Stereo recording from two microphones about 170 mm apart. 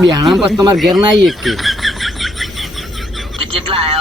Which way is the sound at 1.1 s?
Centre (ahead or behind).